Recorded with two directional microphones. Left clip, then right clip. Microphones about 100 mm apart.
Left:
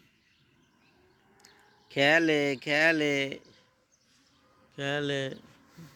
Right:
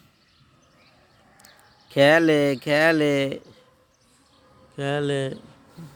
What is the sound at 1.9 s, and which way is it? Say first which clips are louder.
Speech: right 7 dB; 40° right (ahead or behind).